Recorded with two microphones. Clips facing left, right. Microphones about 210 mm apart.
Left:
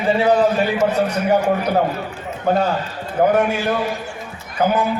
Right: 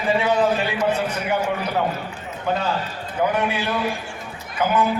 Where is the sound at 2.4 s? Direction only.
45° left (ahead or behind).